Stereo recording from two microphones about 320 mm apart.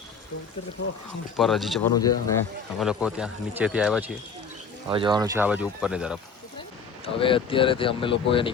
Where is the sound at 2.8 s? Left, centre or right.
Centre.